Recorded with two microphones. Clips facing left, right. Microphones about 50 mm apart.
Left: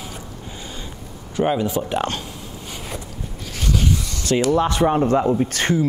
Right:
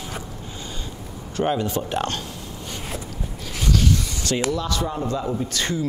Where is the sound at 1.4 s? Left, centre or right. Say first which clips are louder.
Left 3 dB; centre.